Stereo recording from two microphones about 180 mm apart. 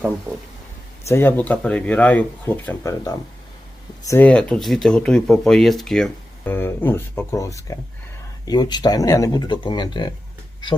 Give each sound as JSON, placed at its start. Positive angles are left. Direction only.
{"t": 1.0, "sound": "speech", "side_deg": 15}